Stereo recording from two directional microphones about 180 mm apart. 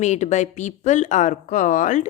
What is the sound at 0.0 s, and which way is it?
Speech, 40° left (ahead or behind).